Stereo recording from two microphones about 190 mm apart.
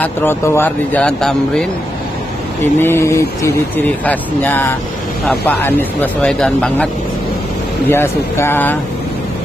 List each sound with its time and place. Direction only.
0.0 s speech: 10° left (ahead or behind)
7.9 s speech: 10° left (ahead or behind)